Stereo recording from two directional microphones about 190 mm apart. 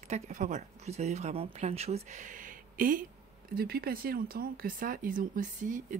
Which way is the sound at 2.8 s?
45° right (ahead or behind).